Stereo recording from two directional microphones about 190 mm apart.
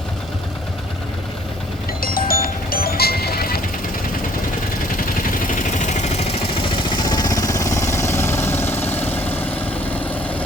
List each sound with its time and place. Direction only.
2.0 s music: 50° left (ahead or behind)
4.9 s vehicle: 45° left (ahead or behind); by 10.4 s 10° left (ahead or behind)